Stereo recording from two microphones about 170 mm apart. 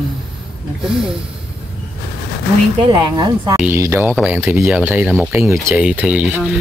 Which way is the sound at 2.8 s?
25° right (ahead or behind).